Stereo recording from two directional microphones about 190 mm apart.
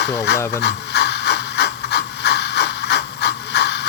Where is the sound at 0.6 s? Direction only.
65° left (ahead or behind).